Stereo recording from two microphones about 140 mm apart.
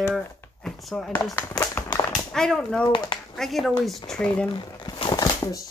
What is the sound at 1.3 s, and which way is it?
Speech, 15° left (ahead or behind).